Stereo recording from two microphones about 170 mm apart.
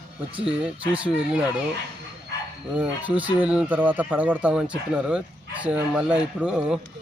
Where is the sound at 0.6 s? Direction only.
5° right (ahead or behind).